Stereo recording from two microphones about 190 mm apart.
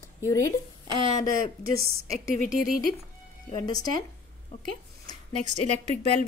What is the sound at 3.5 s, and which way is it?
Speech, 20° left (ahead or behind).